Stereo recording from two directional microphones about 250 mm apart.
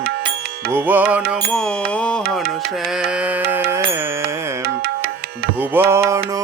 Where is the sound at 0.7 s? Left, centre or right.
Centre.